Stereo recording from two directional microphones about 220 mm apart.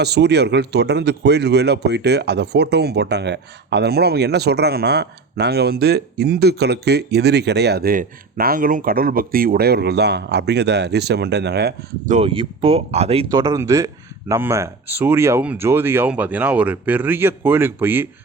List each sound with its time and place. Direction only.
0.0 s speech: 50° right (ahead or behind)
12.1 s speech: 25° right (ahead or behind)
13.3 s speech: 15° right (ahead or behind)